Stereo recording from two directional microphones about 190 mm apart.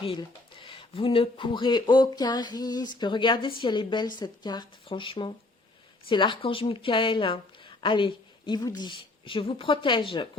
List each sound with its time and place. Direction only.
0.0 s a woman's voice: 25° left (ahead or behind)